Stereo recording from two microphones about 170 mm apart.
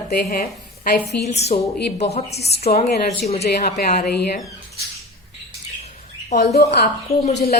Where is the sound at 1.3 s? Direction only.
40° left (ahead or behind).